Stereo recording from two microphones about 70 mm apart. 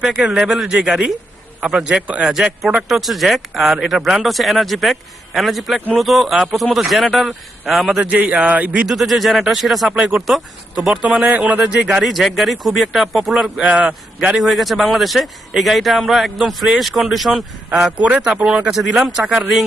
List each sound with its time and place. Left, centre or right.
0.2 s speech: centre
1.6 s a man's voice: centre
2.2 s speech: centre
7.9 s a man's voice: centre
8.9 s speech: centre
13.7 s a man's voice: right
14.3 s speech: centre
17.9 s speech: centre